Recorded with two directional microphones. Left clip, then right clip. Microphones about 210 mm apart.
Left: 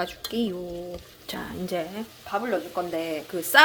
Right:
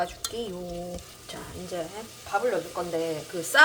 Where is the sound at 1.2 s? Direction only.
45° left (ahead or behind).